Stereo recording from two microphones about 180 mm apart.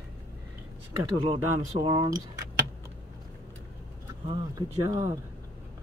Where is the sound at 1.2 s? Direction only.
30° right (ahead or behind).